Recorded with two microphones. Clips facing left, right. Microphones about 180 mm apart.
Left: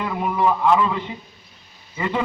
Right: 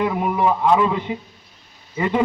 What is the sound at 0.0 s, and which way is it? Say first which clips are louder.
A man's voice: right 2 dB; 15° right (ahead or behind).